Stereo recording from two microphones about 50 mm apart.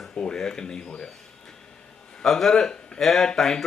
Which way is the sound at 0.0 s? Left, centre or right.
Centre.